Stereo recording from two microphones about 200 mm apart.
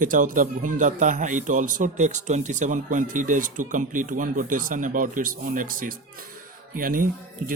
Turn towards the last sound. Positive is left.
turn(degrees=-45)  # may be behind; listen again after turning